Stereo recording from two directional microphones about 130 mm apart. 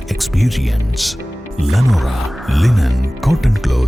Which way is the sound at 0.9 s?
Centre (ahead or behind).